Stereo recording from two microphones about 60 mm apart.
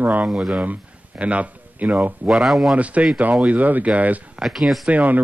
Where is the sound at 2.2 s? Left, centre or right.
Centre.